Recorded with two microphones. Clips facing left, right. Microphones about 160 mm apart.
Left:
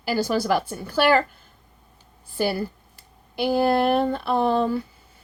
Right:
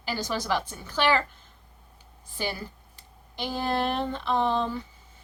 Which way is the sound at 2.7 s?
10° left (ahead or behind).